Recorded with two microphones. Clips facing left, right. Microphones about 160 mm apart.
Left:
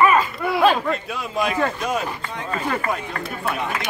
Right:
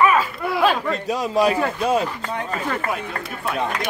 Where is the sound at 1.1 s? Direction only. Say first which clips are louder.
Right 5 dB; 35° right (ahead or behind).